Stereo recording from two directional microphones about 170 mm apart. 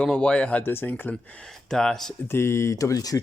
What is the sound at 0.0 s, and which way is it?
Speech, 5° left (ahead or behind).